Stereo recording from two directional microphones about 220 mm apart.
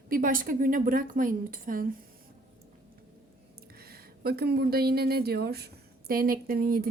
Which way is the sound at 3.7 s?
45° right (ahead or behind).